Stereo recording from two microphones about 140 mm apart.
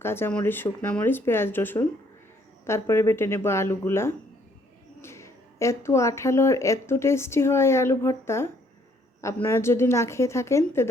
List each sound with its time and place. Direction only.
0.0 s speech: 15° left (ahead or behind)